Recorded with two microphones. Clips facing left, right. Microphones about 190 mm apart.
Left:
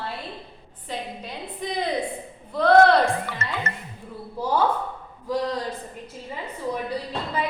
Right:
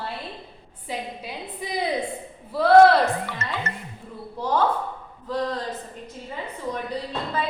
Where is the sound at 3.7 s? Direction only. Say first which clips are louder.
Even; 50° left (ahead or behind).